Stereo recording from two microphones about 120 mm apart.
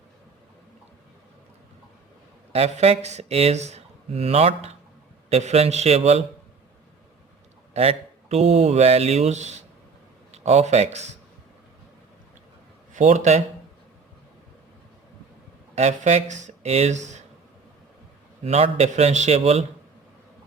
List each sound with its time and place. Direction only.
2.5 s speech: 60° right (ahead or behind)
7.7 s speech: 60° right (ahead or behind)
12.9 s a man's voice: 90° right
15.7 s speech: 70° right (ahead or behind)
18.4 s speech: 60° right (ahead or behind)